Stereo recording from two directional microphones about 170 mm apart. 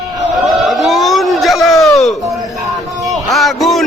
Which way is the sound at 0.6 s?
Centre (ahead or behind).